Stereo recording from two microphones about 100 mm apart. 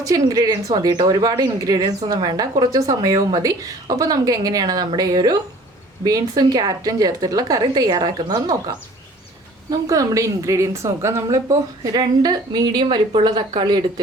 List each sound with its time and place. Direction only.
0.0 s speech: 35° right (ahead or behind)